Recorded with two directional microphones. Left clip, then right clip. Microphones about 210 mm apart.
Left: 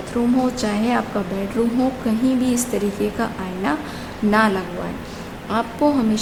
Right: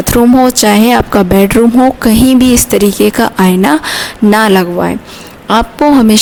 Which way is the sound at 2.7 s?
50° right (ahead or behind).